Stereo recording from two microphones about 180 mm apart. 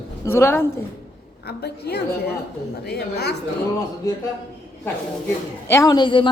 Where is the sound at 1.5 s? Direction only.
60° left (ahead or behind).